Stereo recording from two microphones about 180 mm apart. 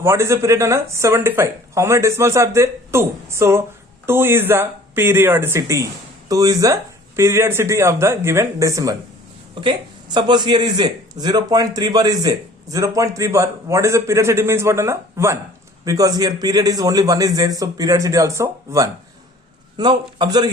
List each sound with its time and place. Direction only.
0.0 s a man's voice: 15° right (ahead or behind)
10.2 s a man's voice: 25° right (ahead or behind)